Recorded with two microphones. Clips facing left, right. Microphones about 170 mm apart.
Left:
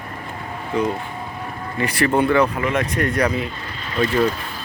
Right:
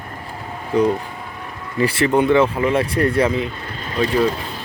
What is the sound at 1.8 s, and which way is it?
Speech, 30° right (ahead or behind).